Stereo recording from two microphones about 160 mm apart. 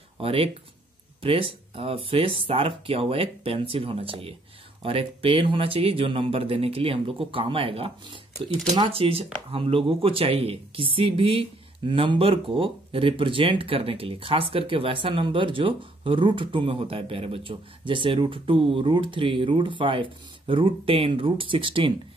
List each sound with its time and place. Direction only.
0.2 s speech: 35° right (ahead or behind)